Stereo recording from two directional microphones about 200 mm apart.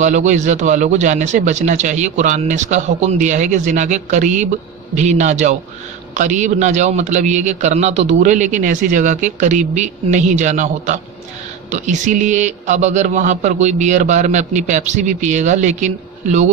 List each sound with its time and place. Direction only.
0.0 s a man's voice: 35° right (ahead or behind)